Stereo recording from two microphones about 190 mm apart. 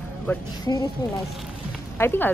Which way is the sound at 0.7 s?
20° left (ahead or behind).